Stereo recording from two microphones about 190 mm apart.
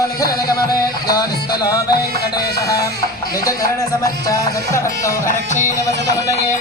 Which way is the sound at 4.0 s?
20° left (ahead or behind).